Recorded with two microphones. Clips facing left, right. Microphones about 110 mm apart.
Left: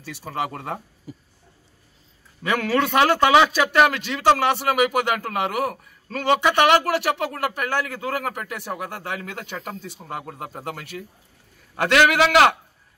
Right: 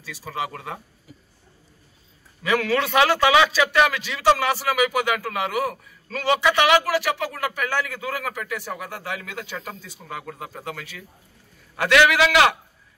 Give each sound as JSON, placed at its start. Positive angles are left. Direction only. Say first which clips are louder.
{"t": 0.5, "sound": "a man's voice", "louder": "left 3 dB", "side_deg": 45}
{"t": 2.4, "sound": "a man's voice", "louder": "even", "side_deg": 45}
{"t": 10.0, "sound": "speech", "louder": "even", "side_deg": 25}
{"t": 10.6, "sound": "a man's voice", "louder": "left 2 dB", "side_deg": 50}